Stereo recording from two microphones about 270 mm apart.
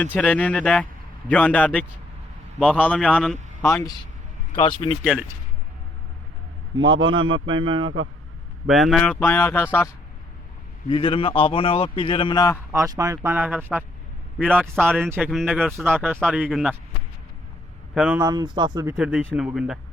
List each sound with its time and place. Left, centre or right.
0.1 s a man's voice: centre
7.0 s speech: centre
8.6 s a man's voice: centre
10.8 s a man's voice: centre
12.7 s a man's voice: centre
17.9 s speech: centre
18.9 s a man's voice: centre